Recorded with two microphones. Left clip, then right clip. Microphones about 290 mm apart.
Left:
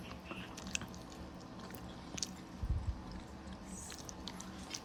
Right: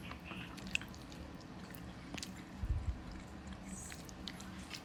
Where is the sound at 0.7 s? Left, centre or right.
Left.